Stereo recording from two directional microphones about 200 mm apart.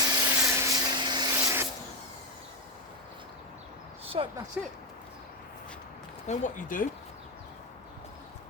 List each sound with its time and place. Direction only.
0.0 s vacuum cleaner: 15° right (ahead or behind)
4.0 s a sound: 30° right (ahead or behind)
4.6 s speech: 5° right (ahead or behind)
6.2 s speech: 40° left (ahead or behind)